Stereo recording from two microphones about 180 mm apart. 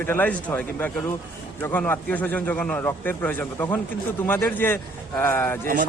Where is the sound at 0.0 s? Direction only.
10° left (ahead or behind).